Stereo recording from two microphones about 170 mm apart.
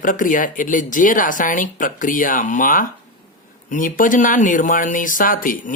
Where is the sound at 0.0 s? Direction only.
50° left (ahead or behind).